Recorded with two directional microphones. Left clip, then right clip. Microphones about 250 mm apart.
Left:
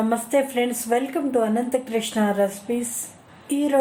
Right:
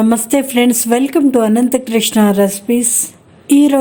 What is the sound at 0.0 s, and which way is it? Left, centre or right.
Speech, right.